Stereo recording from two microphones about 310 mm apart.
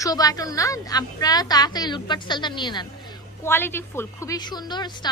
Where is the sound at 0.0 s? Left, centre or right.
Centre.